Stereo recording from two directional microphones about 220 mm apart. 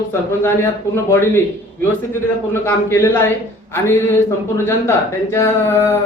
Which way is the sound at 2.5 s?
10° left (ahead or behind).